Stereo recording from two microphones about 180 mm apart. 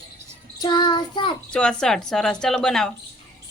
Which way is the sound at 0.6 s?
25° left (ahead or behind).